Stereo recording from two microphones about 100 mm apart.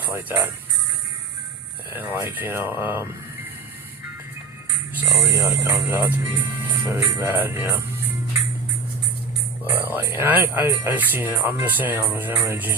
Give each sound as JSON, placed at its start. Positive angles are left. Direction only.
{"t": 0.0, "sound": "speech", "side_deg": -20}
{"t": 1.9, "sound": "speech", "side_deg": -20}
{"t": 4.9, "sound": "speech", "side_deg": -25}
{"t": 9.6, "sound": "speech", "side_deg": -20}